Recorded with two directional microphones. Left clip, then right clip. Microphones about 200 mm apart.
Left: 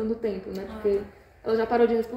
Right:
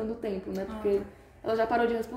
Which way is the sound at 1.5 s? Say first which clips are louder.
Left 4 dB; 65° right (ahead or behind).